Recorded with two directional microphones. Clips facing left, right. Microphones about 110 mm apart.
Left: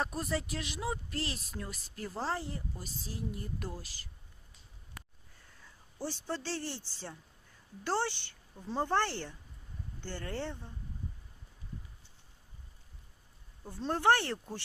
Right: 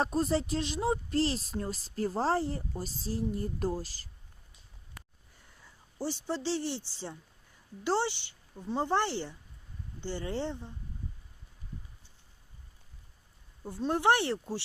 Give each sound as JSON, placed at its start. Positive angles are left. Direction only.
{"t": 0.0, "sound": "speech", "side_deg": -30}
{"t": 6.0, "sound": "speech", "side_deg": -15}
{"t": 8.5, "sound": "speech", "side_deg": -5}
{"t": 8.8, "sound": "speech", "side_deg": -15}
{"t": 13.7, "sound": "speech", "side_deg": -10}